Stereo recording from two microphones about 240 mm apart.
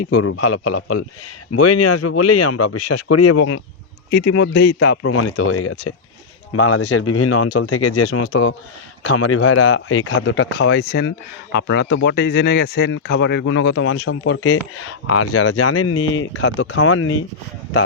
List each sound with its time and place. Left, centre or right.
0.1 s speech: left
5.0 s speech: left